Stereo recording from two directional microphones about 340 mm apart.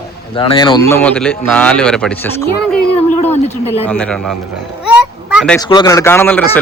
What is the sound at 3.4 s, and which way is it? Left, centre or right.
Speech, centre.